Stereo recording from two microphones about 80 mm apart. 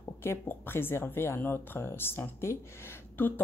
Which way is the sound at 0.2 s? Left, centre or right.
Left.